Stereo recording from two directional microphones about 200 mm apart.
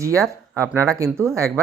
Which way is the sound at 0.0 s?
15° right (ahead or behind).